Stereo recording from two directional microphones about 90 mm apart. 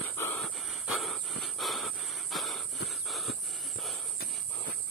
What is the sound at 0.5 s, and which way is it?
Wheeze, centre (ahead or behind).